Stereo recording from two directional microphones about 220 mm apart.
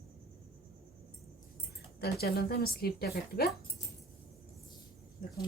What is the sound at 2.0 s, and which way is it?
Speech, 45° left (ahead or behind).